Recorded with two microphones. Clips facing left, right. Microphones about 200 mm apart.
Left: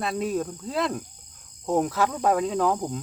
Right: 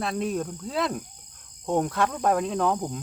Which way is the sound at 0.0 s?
Centre (ahead or behind).